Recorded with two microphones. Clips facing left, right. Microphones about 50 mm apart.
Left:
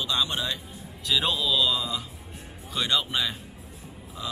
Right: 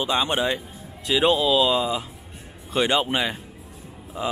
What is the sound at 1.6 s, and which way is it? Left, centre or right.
Speech, right.